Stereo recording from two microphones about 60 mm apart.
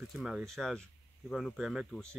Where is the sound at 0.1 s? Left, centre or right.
Centre.